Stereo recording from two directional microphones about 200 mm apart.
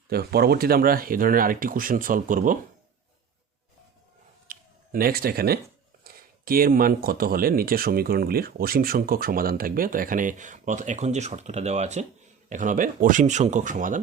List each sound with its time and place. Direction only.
0.1 s speech: 50° right (ahead or behind)
4.4 s finger snapping: 45° right (ahead or behind)
6.0 s speech: 45° right (ahead or behind)